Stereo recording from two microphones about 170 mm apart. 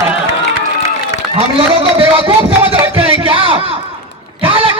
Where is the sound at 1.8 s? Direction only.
30° right (ahead or behind).